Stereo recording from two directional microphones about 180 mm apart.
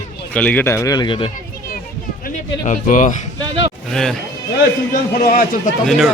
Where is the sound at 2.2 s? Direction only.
45° left (ahead or behind).